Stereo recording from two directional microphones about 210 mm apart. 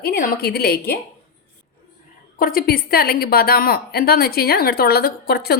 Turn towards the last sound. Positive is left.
turn(degrees=50)  # may be behind; listen again after turning